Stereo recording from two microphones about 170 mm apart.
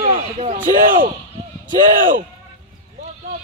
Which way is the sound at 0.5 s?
50° right (ahead or behind).